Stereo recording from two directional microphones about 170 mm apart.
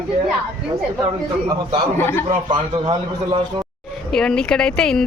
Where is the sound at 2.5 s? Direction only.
30° right (ahead or behind).